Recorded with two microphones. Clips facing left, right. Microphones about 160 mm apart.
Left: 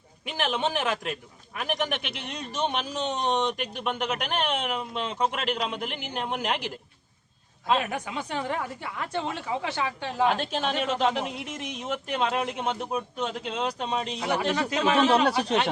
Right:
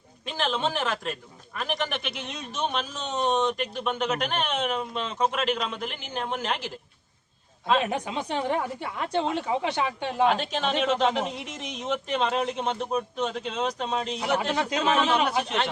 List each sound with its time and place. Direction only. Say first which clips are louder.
0.3 s speech: even; 15° left (ahead or behind)
7.9 s speech: right 3 dB; 20° right (ahead or behind)
10.5 s speech: right 2 dB; 10° left (ahead or behind)
14.3 s speech: even; 20° right (ahead or behind)
15.1 s speech: left 3 dB; 35° left (ahead or behind)